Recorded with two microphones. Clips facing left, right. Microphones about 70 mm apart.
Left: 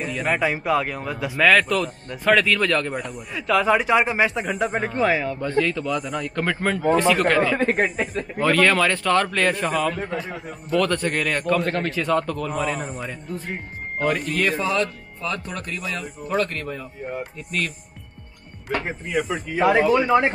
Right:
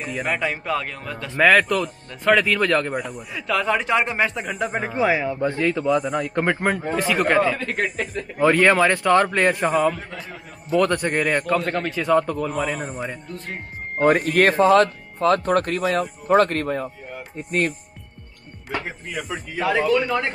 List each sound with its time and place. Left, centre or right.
0.1 s speech: centre
1.4 s a man's voice: centre
6.9 s a man's voice: centre
7.5 s speech: left
8.4 s a man's voice: centre
9.9 s speech: centre
10.8 s a man's voice: centre
11.4 s a man's voice: centre
12.1 s a man's voice: centre
12.4 s speech: centre
14.3 s speech: right
17.4 s speech: right
19.0 s speech: centre